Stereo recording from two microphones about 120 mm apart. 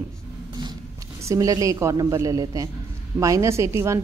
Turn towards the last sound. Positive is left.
turn(degrees=-25)  # may be behind; listen again after turning